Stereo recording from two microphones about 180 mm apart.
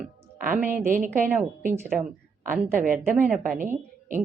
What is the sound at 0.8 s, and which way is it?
Speech, 50° right (ahead or behind).